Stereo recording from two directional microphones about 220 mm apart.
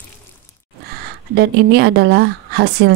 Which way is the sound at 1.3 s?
50° right (ahead or behind).